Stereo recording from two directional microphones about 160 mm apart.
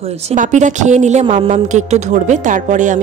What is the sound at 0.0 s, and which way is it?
A woman's voice, 45° right (ahead or behind).